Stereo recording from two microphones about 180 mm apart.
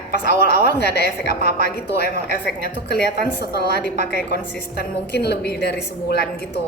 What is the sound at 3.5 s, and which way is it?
A woman's voice, 65° left (ahead or behind).